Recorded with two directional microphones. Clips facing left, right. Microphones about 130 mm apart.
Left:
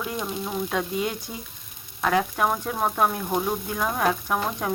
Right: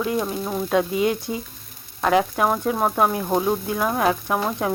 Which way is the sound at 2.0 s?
25° right (ahead or behind).